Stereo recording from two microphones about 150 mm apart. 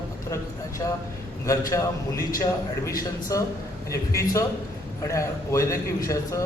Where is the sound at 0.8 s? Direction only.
25° left (ahead or behind).